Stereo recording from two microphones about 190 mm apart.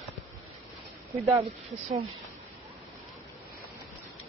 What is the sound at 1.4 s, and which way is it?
Speech, 35° right (ahead or behind).